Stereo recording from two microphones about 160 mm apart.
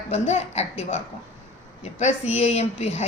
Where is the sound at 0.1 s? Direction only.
40° left (ahead or behind).